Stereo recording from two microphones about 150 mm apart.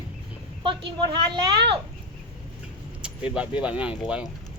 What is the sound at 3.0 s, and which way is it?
Speech, 5° right (ahead or behind).